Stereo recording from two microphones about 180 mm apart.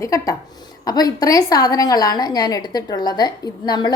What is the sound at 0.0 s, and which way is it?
A woman's voice, 20° left (ahead or behind).